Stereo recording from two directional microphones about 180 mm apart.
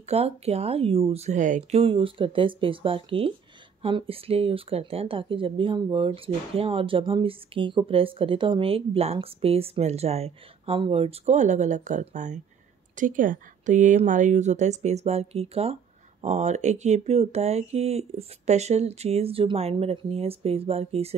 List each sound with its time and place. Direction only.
0.1 s speech: 35° right (ahead or behind)